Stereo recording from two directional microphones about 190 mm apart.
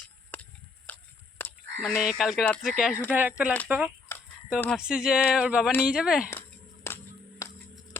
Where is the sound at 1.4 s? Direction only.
10° left (ahead or behind).